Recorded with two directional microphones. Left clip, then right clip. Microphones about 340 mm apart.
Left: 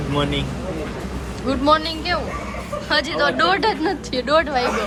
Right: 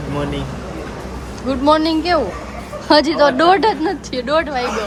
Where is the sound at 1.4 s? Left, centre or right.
Centre.